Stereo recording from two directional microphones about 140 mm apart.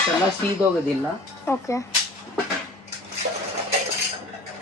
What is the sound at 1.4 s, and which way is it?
Speech, 20° left (ahead or behind).